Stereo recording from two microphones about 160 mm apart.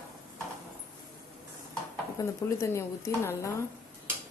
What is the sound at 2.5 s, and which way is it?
Speech, 15° left (ahead or behind).